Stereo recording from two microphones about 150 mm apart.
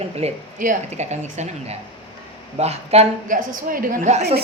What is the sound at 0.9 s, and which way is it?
A woman's voice, 50° right (ahead or behind).